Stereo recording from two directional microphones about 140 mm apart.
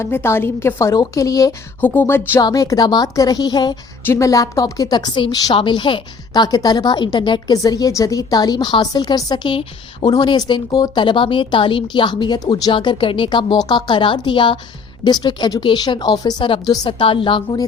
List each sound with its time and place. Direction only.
0.0 s a woman's voice: 15° left (ahead or behind)
1.8 s music: 10° left (ahead or behind)
2.4 s a woman's voice: 25° left (ahead or behind)